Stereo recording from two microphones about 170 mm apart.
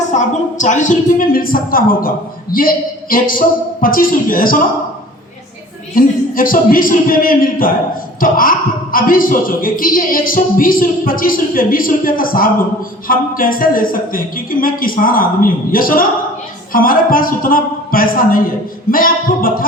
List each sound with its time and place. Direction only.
0.1 s a woman's voice: 45° left (ahead or behind)
5.9 s a woman's voice: 55° left (ahead or behind)